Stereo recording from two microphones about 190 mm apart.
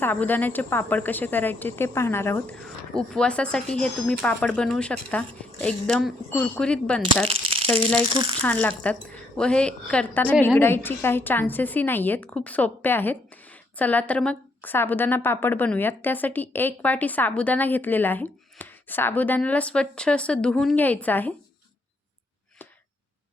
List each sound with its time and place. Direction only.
0.0 s a woman's voice: 10° left (ahead or behind)
7.3 s a sound: 30° right (ahead or behind)
7.9 s speech: 30° right (ahead or behind)
8.4 s a woman's voice: 5° left (ahead or behind)